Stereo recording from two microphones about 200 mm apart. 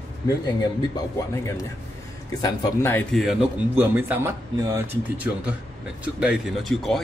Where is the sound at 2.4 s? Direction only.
15° left (ahead or behind); by 3.4 s centre (ahead or behind).